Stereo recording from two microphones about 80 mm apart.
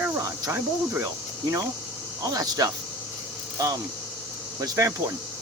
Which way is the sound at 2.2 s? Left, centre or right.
Right.